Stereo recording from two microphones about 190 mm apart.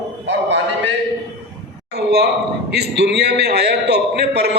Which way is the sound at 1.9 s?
60° right (ahead or behind).